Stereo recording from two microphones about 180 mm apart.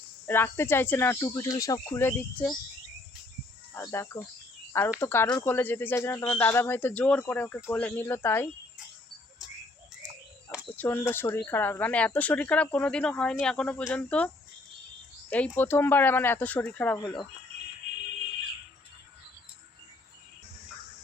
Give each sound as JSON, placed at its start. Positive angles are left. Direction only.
{"t": 0.3, "sound": "speech", "side_deg": 10}
{"t": 3.8, "sound": "speech", "side_deg": 15}
{"t": 10.8, "sound": "speech", "side_deg": 10}
{"t": 15.3, "sound": "speech", "side_deg": 10}